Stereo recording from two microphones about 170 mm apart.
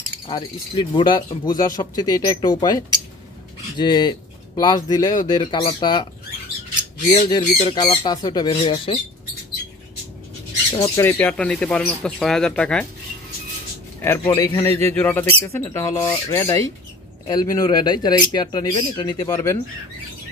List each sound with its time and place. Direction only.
0.3 s speech: 30° left (ahead or behind)
7.2 s speech: 25° left (ahead or behind)
10.8 s speech: 15° left (ahead or behind)
14.0 s speech: 15° left (ahead or behind)
19.3 s speech: 15° left (ahead or behind)